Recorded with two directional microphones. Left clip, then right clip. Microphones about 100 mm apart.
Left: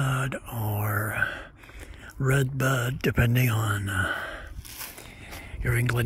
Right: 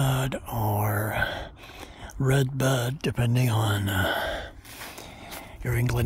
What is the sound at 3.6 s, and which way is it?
Speech, 25° right (ahead or behind).